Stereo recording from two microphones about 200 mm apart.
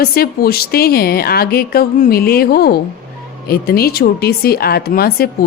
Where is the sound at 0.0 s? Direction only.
50° left (ahead or behind).